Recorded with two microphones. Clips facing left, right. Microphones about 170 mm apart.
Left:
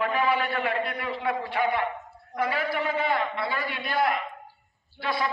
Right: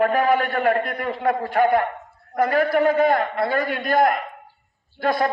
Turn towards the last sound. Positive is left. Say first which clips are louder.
# right 8 dB
turn(degrees=-45)  # may be behind; listen again after turning